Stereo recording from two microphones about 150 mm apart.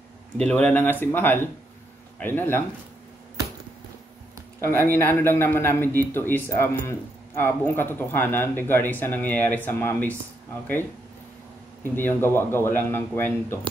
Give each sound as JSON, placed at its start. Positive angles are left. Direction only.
{"t": 0.4, "sound": "a man's voice", "side_deg": 5}
{"t": 4.6, "sound": "a man's voice", "side_deg": 15}